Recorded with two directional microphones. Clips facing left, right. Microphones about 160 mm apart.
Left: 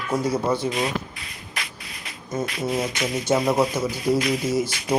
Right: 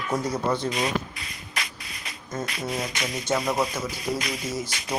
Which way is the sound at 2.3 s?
10° left (ahead or behind).